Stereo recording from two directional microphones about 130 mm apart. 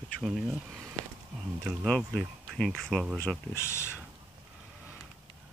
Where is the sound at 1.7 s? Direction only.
5° left (ahead or behind).